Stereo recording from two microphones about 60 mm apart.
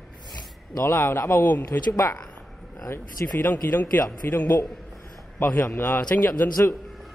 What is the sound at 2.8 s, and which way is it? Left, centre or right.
Speech, left.